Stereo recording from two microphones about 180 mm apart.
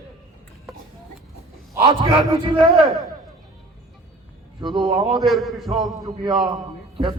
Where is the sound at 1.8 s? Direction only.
30° right (ahead or behind).